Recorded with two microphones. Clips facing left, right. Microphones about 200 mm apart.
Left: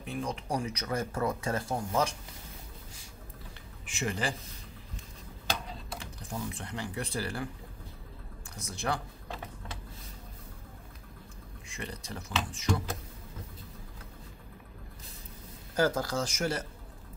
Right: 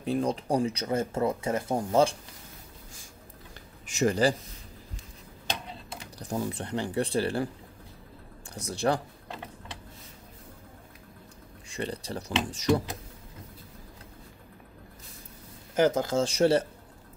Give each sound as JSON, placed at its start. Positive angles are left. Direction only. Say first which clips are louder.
{"t": 0.0, "sound": "speech", "louder": "right 8 dB", "side_deg": -35}
{"t": 3.8, "sound": "speech", "louder": "right 9 dB", "side_deg": -40}
{"t": 6.1, "sound": "speech", "louder": "right 8 dB", "side_deg": -35}
{"t": 8.5, "sound": "speech", "louder": "right 7 dB", "side_deg": -35}
{"t": 11.7, "sound": "speech", "louder": "right 7 dB", "side_deg": -30}
{"t": 15.7, "sound": "speech", "louder": "right 5 dB", "side_deg": -20}